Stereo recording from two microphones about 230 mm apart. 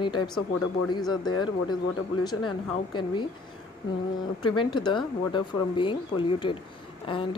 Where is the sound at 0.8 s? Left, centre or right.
Centre.